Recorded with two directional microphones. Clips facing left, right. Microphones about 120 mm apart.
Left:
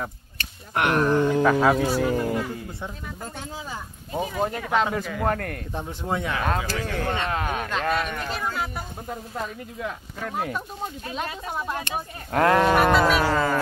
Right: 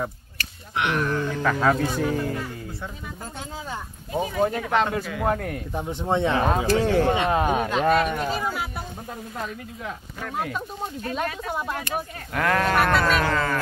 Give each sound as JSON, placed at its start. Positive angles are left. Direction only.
{"t": 0.7, "sound": "speech", "side_deg": 45}
{"t": 1.1, "sound": "speech", "side_deg": 15}
{"t": 4.1, "sound": "speech", "side_deg": 0}
{"t": 5.9, "sound": "speech", "side_deg": -25}
{"t": 7.9, "sound": "speech", "side_deg": 0}
{"t": 10.2, "sound": "speech", "side_deg": 10}
{"t": 12.3, "sound": "speech", "side_deg": 30}